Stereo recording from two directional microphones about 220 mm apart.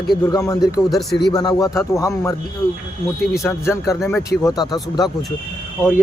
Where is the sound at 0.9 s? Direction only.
Centre (ahead or behind).